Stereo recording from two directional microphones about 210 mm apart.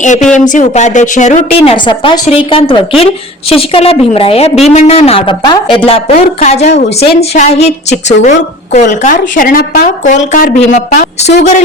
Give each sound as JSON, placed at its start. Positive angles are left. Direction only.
{"t": 0.0, "sound": "a woman's voice", "side_deg": 35}
{"t": 1.8, "sound": "a woman's voice", "side_deg": 20}